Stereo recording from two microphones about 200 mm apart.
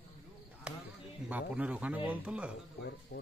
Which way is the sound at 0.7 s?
5° right (ahead or behind).